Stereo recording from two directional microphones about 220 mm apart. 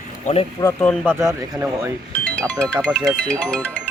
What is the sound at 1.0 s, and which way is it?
Speech, 10° right (ahead or behind).